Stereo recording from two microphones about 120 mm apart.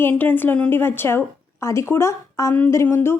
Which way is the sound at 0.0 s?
15° left (ahead or behind).